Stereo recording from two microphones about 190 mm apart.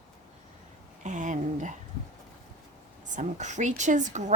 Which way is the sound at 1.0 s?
40° right (ahead or behind).